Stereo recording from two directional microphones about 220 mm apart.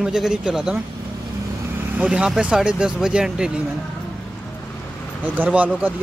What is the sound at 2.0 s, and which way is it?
Speech, 5° right (ahead or behind).